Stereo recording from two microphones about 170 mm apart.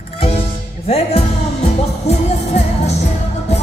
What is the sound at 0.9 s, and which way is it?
Music, 35° left (ahead or behind).